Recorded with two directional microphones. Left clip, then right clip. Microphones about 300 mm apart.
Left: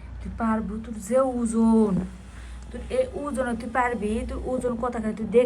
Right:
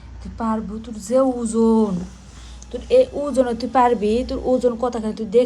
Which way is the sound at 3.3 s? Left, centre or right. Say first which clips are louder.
Right 9 dB; centre.